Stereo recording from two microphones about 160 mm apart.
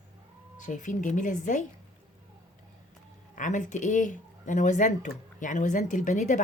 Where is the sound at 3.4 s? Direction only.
50° left (ahead or behind).